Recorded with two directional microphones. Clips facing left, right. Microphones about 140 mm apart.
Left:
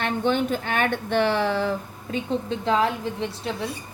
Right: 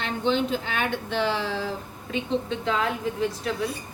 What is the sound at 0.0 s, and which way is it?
Speech, 55° left (ahead or behind).